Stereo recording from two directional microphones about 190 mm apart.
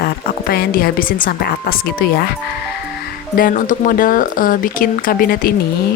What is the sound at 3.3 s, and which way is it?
Speech, 45° left (ahead or behind).